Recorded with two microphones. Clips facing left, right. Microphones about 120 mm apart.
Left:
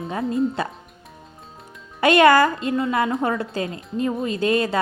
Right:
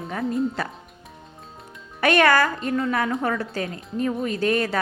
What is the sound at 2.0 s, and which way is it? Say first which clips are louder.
Speech: left 4 dB; 15° left (ahead or behind).